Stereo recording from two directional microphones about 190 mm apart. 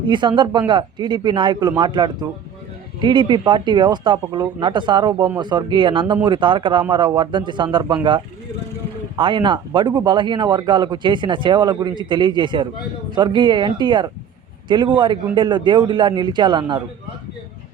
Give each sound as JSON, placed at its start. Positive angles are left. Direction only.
{"t": 0.1, "sound": "a man's voice", "side_deg": -25}